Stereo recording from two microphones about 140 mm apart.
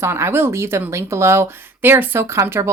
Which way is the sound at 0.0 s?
20° right (ahead or behind).